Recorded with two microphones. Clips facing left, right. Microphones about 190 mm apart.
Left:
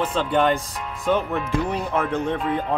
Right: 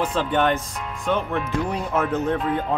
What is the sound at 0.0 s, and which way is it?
Speech, 5° right (ahead or behind).